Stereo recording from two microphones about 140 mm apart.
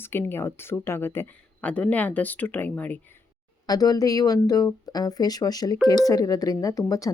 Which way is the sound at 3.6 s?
25° left (ahead or behind).